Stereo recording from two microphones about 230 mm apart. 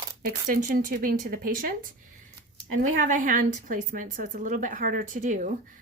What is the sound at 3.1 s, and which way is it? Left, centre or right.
A woman's voice, right.